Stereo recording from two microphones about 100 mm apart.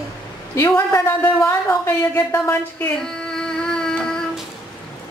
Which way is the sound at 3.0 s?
5° left (ahead or behind).